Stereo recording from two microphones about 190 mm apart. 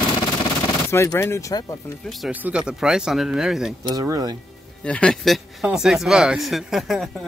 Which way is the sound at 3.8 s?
20° right (ahead or behind).